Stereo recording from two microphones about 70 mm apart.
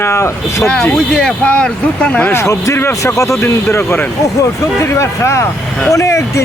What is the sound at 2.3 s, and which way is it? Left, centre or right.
Speech, left.